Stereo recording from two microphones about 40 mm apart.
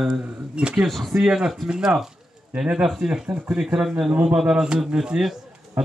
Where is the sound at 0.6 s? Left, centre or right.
Right.